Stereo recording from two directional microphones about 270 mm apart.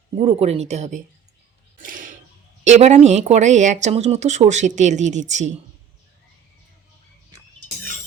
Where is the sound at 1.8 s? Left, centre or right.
Right.